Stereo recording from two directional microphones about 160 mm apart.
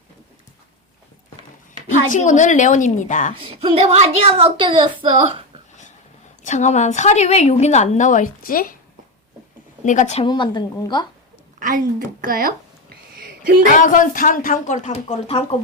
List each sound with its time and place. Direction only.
2.0 s a woman's voice: 50° left (ahead or behind)
3.4 s a woman's voice: 35° right (ahead or behind)
6.4 s a woman's voice: 50° left (ahead or behind)
9.8 s a woman's voice: 50° left (ahead or behind)
10.2 s a woman's voice: 30° left (ahead or behind)
11.6 s speech: 60° right (ahead or behind)
13.1 s a sound: 65° right (ahead or behind)
13.7 s a woman's voice: 55° left (ahead or behind)